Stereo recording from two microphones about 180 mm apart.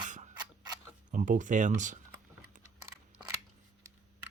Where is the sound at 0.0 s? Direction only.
45° right (ahead or behind).